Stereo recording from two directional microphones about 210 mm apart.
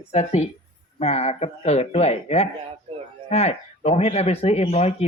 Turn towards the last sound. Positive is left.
turn(degrees=30)  # may be behind; listen again after turning